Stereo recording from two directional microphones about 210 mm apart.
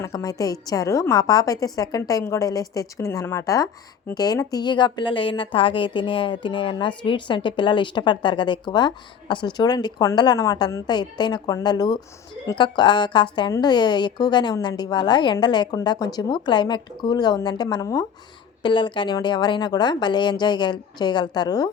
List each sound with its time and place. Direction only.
0.0 s a woman's voice: 15° left (ahead or behind)